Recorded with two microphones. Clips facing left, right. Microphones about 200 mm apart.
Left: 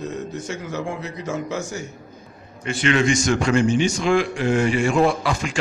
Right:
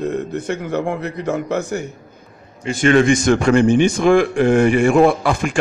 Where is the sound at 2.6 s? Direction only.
45° right (ahead or behind).